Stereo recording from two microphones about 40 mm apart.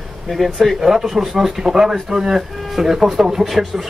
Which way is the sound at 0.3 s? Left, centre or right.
Centre.